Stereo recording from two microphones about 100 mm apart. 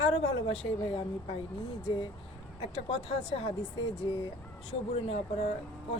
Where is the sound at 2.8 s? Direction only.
70° left (ahead or behind).